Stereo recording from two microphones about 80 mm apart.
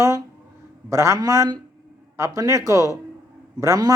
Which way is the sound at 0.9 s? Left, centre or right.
Right.